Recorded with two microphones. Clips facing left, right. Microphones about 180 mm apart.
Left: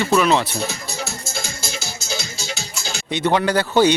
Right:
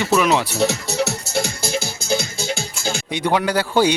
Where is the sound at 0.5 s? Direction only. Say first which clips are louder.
Right 7 dB; 75° right (ahead or behind); by 2.3 s 55° right (ahead or behind).